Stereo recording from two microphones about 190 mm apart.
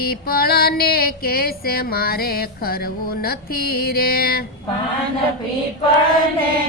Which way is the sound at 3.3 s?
55° left (ahead or behind).